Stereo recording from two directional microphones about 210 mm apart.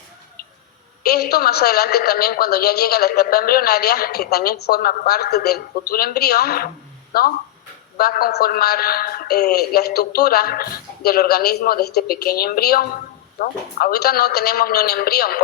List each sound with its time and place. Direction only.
1.0 s a woman's voice: 50° left (ahead or behind)